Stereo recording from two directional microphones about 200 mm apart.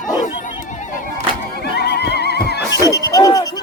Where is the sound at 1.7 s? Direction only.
55° left (ahead or behind).